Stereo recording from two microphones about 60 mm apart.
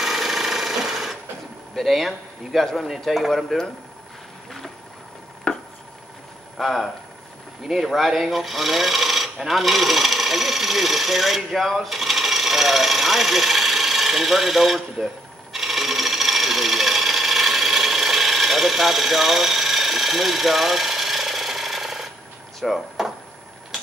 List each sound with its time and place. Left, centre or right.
0.0 s a sound: centre
1.8 s speech: centre
5.5 s chopping: centre
6.5 s speech: centre
15.5 s wood: centre
22.6 s drawer open or close: centre